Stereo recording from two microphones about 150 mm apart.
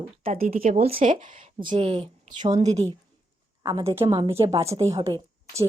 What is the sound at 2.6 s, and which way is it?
Speech, 50° right (ahead or behind).